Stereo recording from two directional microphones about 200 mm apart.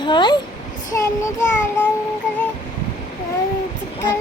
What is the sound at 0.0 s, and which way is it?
Speech, 25° left (ahead or behind).